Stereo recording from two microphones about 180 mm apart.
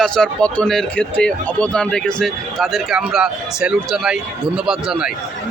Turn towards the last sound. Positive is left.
turn(degrees=-5)  # may be behind; listen again after turning